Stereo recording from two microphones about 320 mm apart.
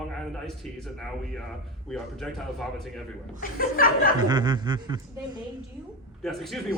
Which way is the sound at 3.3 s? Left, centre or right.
Left.